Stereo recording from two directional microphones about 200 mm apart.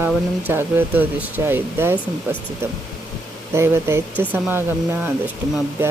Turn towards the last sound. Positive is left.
turn(degrees=-10)  # may be behind; listen again after turning